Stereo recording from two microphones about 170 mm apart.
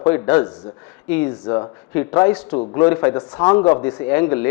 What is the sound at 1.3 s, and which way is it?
Speech, 25° left (ahead or behind).